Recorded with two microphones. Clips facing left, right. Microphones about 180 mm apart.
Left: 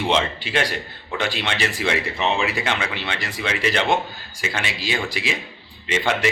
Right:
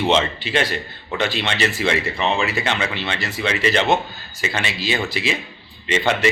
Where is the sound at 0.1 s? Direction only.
10° left (ahead or behind).